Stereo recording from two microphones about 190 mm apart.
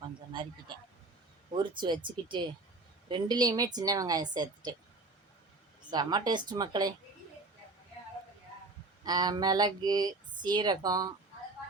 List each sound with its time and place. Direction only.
1.5 s speech: 25° right (ahead or behind)
5.9 s speech: 20° right (ahead or behind)
9.0 s speech: 20° right (ahead or behind)